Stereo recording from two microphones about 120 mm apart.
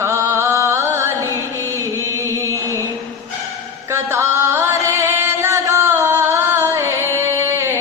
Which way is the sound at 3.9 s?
20° right (ahead or behind).